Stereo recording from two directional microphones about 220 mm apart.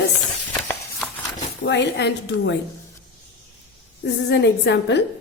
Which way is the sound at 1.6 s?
50° left (ahead or behind).